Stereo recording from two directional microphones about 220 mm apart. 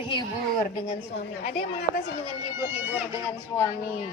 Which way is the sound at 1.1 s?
45° left (ahead or behind).